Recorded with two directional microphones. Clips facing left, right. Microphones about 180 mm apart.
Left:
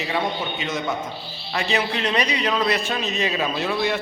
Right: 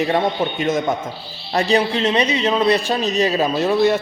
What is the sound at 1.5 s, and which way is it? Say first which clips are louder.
A man's voice: right 7 dB; 40° right (ahead or behind).